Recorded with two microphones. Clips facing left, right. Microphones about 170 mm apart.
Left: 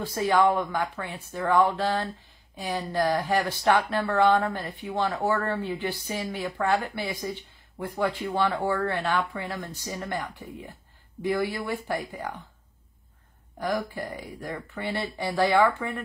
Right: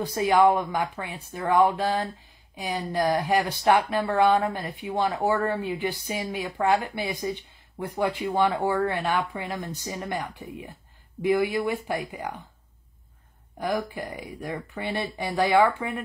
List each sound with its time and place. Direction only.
0.0 s speech: 15° right (ahead or behind)
13.6 s speech: 15° right (ahead or behind)